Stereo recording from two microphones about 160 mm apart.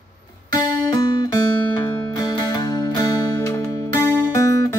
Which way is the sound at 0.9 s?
25° left (ahead or behind).